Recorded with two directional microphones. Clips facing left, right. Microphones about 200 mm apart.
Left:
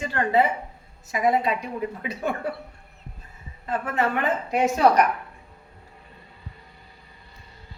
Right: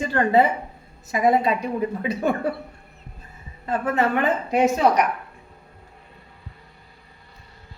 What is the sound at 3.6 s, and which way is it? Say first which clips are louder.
A woman's voice: right 3 dB; 30° right (ahead or behind).